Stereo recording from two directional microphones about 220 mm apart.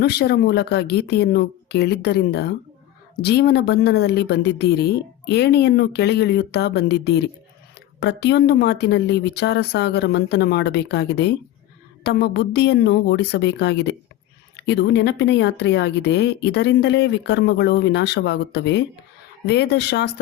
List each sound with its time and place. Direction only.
0.0 s a woman's voice: 50° left (ahead or behind)